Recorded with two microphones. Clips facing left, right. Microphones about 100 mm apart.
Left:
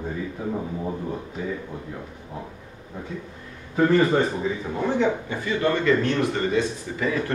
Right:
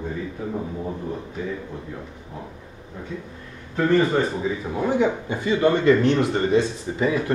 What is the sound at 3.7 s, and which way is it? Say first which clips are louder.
Speech: even; 5° left (ahead or behind).